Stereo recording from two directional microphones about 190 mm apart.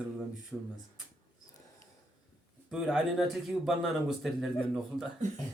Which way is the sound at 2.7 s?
Centre (ahead or behind).